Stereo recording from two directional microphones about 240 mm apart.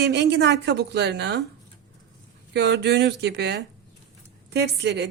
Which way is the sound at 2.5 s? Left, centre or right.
Right.